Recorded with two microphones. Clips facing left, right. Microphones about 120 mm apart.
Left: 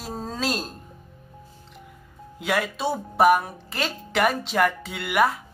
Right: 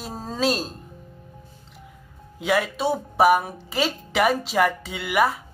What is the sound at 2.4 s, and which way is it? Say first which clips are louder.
Speech: right 3 dB; centre (ahead or behind).